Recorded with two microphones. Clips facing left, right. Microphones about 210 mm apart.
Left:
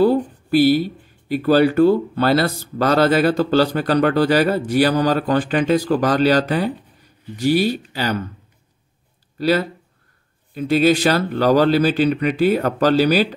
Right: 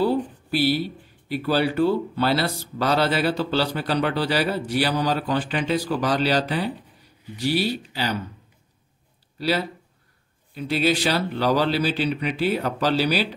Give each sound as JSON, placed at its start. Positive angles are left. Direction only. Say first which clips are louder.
{"t": 0.0, "sound": "speech", "louder": "left 6 dB", "side_deg": 45}
{"t": 9.4, "sound": "speech", "louder": "left 6 dB", "side_deg": 45}